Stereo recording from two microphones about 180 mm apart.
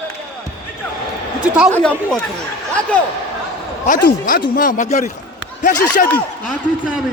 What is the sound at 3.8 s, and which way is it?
Speech, 50° left (ahead or behind).